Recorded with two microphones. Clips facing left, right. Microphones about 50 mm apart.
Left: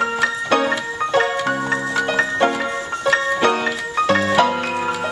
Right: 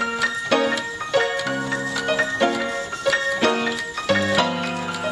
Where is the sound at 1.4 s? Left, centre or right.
Left.